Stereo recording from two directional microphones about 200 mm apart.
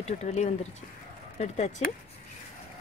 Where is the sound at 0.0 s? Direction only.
35° left (ahead or behind).